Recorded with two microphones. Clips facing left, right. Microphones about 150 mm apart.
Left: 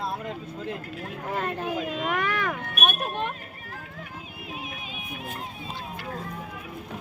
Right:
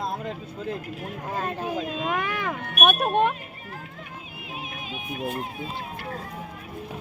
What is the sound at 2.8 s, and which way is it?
Speech, 55° right (ahead or behind).